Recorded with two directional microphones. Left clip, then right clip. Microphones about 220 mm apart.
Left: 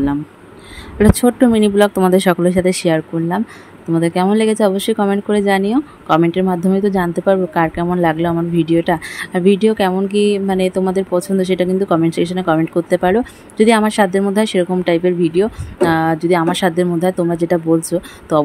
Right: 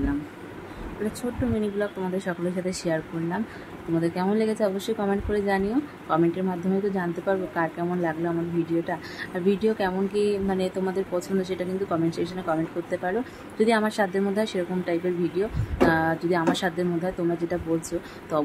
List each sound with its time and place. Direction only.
1.5 s speech: 45° left (ahead or behind)